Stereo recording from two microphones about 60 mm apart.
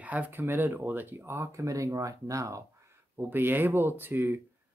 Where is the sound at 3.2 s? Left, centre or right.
Right.